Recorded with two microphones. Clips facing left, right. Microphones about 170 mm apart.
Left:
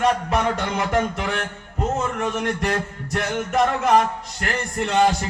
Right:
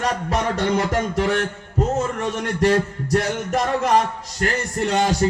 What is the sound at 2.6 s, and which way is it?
A man's voice, 35° right (ahead or behind).